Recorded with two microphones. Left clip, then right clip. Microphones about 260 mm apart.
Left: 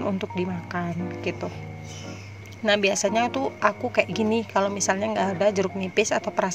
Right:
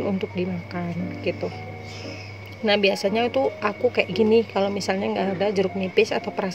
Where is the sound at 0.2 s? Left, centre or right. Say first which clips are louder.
Right 1 dB; left.